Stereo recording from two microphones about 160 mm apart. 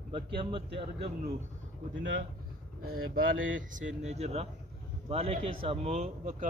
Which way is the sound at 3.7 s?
50° right (ahead or behind).